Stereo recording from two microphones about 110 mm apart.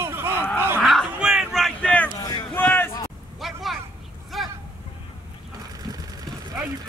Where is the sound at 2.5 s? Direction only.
20° left (ahead or behind).